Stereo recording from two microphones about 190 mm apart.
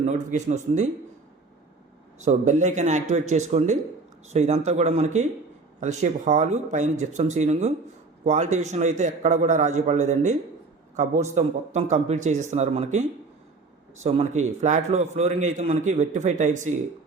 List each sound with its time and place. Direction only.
0.0 s a man's voice: 40° right (ahead or behind)
2.1 s a man's voice: 40° right (ahead or behind)